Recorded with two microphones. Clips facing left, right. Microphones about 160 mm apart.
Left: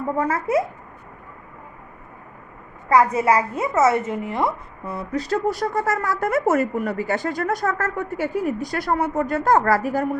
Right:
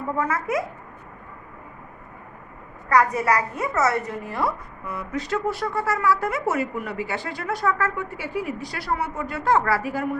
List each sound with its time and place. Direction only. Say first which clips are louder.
0.2 s speech: left 4 dB; 35° left (ahead or behind)
2.9 s a woman's voice: left 3 dB; 25° left (ahead or behind); by 10.2 s 40° left (ahead or behind)